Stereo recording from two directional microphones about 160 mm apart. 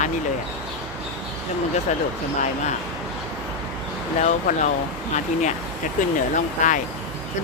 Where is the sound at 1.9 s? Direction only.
45° left (ahead or behind).